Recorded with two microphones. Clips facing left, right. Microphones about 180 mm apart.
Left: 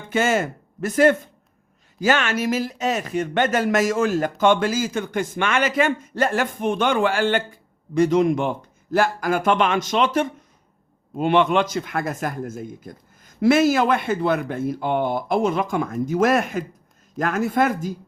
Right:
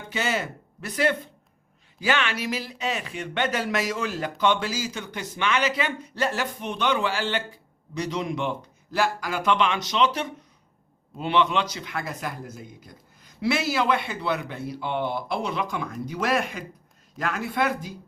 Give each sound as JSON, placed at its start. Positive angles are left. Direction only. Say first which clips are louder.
{"t": 0.1, "sound": "speech", "louder": "left 7 dB", "side_deg": 50}